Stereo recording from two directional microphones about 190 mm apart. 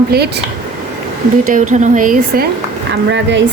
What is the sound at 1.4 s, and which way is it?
Speech, 40° right (ahead or behind).